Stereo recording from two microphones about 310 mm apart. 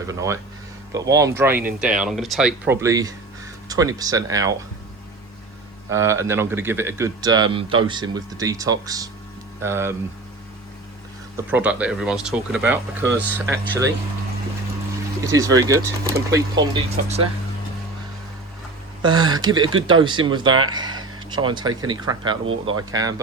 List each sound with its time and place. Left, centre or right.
0.1 s speech: centre
5.9 s speech: centre
11.3 s speech: centre
15.3 s speech: centre
19.0 s speech: centre
20.5 s speech: right
20.7 s speech: centre